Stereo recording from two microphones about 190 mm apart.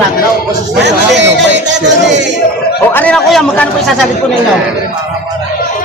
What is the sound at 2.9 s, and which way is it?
Speech, 5° left (ahead or behind).